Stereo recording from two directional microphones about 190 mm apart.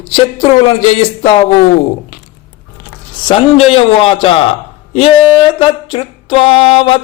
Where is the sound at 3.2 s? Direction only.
30° left (ahead or behind).